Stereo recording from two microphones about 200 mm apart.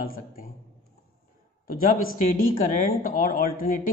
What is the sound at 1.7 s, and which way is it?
Speech, 45° left (ahead or behind).